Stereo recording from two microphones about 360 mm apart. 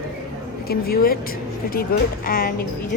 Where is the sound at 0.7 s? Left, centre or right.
Left.